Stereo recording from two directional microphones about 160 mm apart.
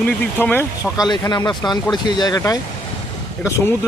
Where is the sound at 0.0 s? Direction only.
10° left (ahead or behind).